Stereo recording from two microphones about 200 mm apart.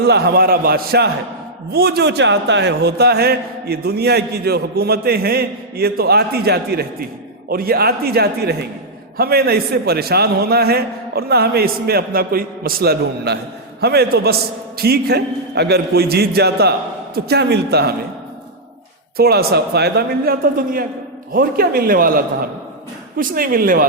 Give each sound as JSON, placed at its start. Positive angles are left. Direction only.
{"t": 0.0, "sound": "a man's voice", "side_deg": -55}
{"t": 19.1, "sound": "a man's voice", "side_deg": -50}